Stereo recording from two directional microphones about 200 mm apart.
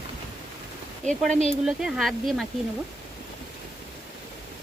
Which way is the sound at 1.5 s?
Centre (ahead or behind).